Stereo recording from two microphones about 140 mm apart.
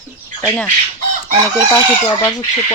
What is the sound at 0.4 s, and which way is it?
Speech, 10° left (ahead or behind).